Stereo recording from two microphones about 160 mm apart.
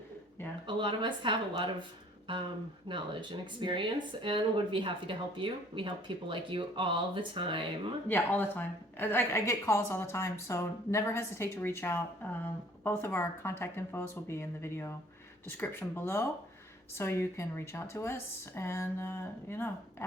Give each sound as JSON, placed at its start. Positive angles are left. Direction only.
{"t": 0.7, "sound": "speech", "side_deg": -30}
{"t": 2.9, "sound": "speech", "side_deg": -30}
{"t": 8.0, "sound": "a woman's voice", "side_deg": 10}